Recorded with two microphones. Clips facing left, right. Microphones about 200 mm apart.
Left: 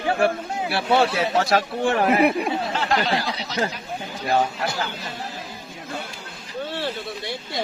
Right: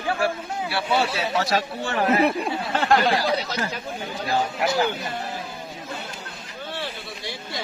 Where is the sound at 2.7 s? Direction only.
50° right (ahead or behind).